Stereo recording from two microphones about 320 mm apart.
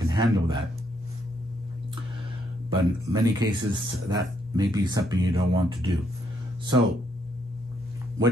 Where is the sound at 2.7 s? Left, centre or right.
Centre.